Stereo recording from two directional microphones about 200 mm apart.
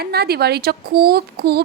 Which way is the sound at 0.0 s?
50° right (ahead or behind).